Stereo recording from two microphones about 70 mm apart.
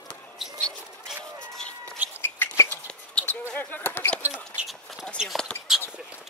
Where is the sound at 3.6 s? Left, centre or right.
Left.